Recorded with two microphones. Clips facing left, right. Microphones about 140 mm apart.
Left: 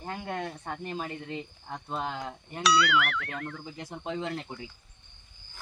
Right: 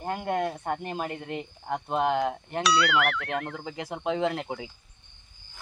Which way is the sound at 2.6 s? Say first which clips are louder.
Right 1 dB; centre (ahead or behind).